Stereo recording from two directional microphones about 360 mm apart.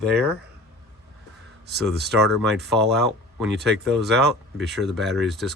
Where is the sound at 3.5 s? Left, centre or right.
Right.